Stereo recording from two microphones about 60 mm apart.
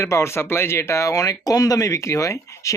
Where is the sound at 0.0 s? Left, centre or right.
Left.